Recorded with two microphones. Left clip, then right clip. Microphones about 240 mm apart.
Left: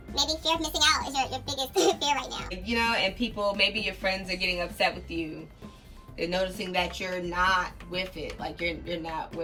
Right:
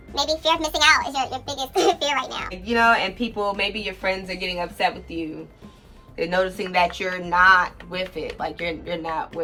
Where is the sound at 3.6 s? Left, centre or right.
Right.